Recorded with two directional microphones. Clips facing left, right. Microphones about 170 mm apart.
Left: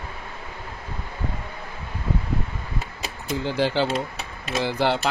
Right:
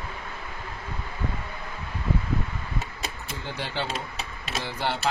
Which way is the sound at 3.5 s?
90° left.